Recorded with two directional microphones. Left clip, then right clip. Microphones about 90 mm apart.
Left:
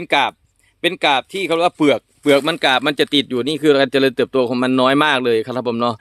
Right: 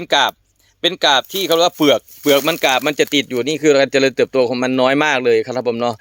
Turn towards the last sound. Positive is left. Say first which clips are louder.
# right 1 dB
turn(degrees=30)  # may be behind; listen again after turning